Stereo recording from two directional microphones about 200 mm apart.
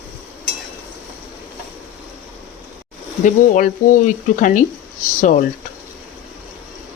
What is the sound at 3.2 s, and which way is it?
Speech, 40° left (ahead or behind).